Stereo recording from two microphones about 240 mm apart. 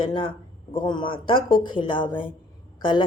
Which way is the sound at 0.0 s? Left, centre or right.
Left.